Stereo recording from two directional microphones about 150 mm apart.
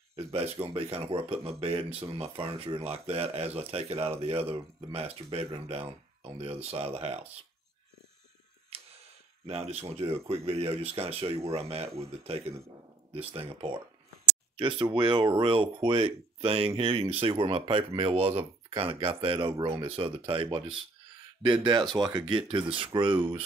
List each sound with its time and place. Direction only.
0.1 s speech: 40° right (ahead or behind)
8.7 s a sound: 40° right (ahead or behind)
9.5 s speech: 40° right (ahead or behind)